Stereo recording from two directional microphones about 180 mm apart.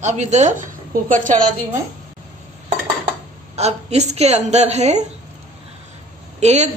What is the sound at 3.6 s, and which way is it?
A woman's voice, 35° right (ahead or behind).